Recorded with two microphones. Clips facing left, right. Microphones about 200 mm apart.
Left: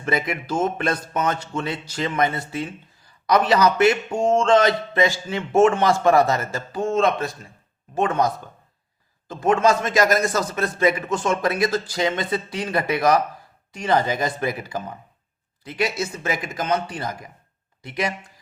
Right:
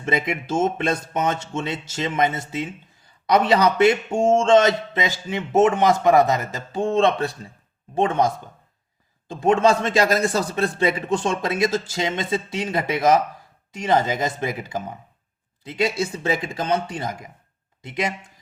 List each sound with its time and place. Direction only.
0.0 s speech: 25° right (ahead or behind)
6.8 s speech: 30° right (ahead or behind)